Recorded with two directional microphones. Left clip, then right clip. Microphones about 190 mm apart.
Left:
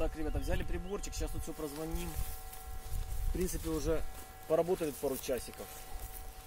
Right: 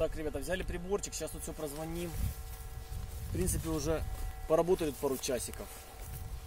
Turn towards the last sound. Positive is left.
turn(degrees=-50)  # may be behind; listen again after turning